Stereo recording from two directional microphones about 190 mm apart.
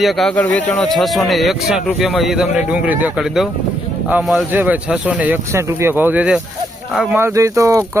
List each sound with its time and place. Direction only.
0.0 s speech: centre (ahead or behind)
7.2 s speech: 15° right (ahead or behind)